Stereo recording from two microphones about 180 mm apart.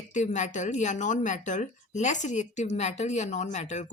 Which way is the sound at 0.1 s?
40° left (ahead or behind).